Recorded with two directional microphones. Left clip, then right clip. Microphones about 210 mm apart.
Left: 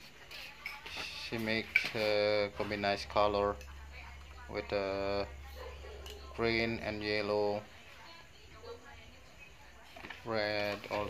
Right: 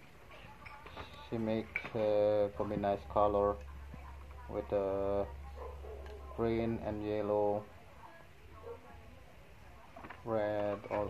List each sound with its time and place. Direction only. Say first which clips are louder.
1.3 s speech: left 4 dB; 25° left (ahead or behind)
6.3 s speech: left 2 dB; 30° left (ahead or behind)
10.2 s speech: even; 30° left (ahead or behind)